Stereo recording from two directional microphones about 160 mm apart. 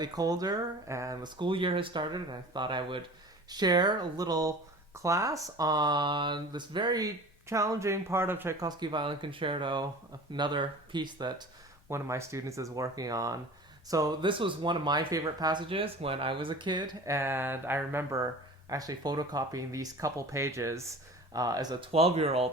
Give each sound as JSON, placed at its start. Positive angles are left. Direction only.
{"t": 0.0, "sound": "speech", "side_deg": -25}
{"t": 8.6, "sound": "speech", "side_deg": -25}
{"t": 17.2, "sound": "a sound", "side_deg": -15}
{"t": 18.7, "sound": "speech", "side_deg": -25}
{"t": 21.9, "sound": "speech", "side_deg": -40}